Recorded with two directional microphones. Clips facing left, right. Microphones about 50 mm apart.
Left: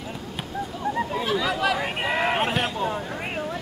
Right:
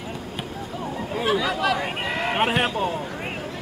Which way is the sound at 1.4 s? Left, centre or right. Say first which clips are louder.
Right 1 dB; centre.